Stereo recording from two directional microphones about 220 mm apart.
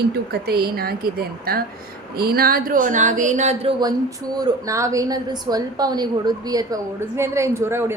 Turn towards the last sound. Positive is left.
turn(degrees=-10)  # may be behind; listen again after turning